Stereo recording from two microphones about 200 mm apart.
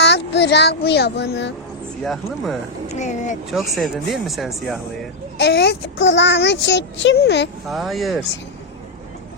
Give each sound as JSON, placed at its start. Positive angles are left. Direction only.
{"t": 0.0, "sound": "speech", "side_deg": 60}
{"t": 2.0, "sound": "speech", "side_deg": 0}
{"t": 2.9, "sound": "speech", "side_deg": 35}
{"t": 3.5, "sound": "speech", "side_deg": 0}
{"t": 5.4, "sound": "speech", "side_deg": 55}
{"t": 7.7, "sound": "speech", "side_deg": 0}